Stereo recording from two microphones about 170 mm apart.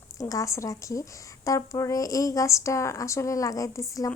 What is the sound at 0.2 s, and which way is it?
Speech, 20° left (ahead or behind).